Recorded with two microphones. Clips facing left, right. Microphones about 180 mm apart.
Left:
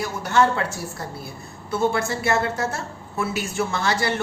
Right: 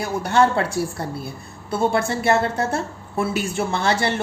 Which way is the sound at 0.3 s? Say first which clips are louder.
Right 2 dB; 30° right (ahead or behind).